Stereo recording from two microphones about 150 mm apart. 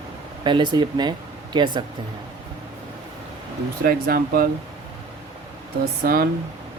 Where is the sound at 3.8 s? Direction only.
85° right.